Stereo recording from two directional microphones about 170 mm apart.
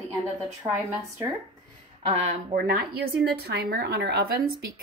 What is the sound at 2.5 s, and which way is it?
A woman's voice, 60° right (ahead or behind).